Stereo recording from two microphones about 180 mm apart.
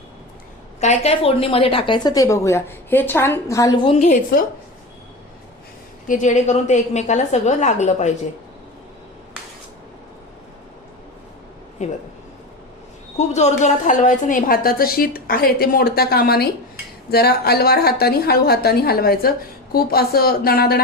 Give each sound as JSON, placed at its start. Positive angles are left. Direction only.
{"t": 0.8, "sound": "a woman's voice", "side_deg": 35}
{"t": 3.8, "sound": "a woman's voice", "side_deg": 40}
{"t": 6.1, "sound": "a woman's voice", "side_deg": 40}
{"t": 11.8, "sound": "a woman's voice", "side_deg": 40}
{"t": 13.1, "sound": "a woman's voice", "side_deg": 40}